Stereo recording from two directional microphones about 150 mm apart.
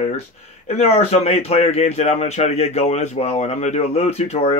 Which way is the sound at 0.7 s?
45° left (ahead or behind).